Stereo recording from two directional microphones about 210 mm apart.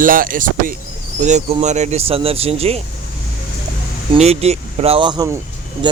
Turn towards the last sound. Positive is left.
turn(degrees=-15)  # may be behind; listen again after turning